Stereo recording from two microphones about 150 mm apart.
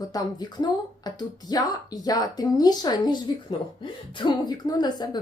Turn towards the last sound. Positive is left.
turn(degrees=30)  # may be behind; listen again after turning